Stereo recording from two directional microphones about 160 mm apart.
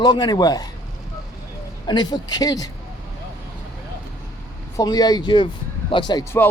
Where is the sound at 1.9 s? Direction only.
25° left (ahead or behind).